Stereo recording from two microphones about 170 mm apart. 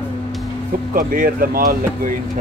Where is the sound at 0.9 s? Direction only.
55° right (ahead or behind).